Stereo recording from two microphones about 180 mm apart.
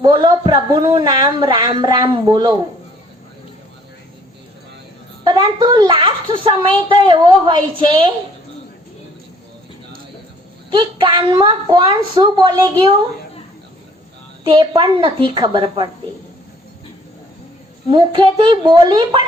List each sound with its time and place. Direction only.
0.0 s a woman's voice: 25° right (ahead or behind)
5.2 s a woman's voice: 25° right (ahead or behind)
10.7 s a woman's voice: 25° right (ahead or behind)
14.4 s a woman's voice: 25° right (ahead or behind)
17.8 s a woman's voice: 25° right (ahead or behind)